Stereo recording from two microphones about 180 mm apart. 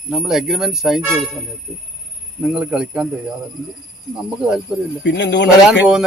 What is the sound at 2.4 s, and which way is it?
Speech, 5° right (ahead or behind).